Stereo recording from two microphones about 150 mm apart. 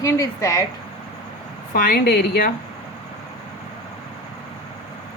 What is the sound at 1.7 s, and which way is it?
Speech, 80° left.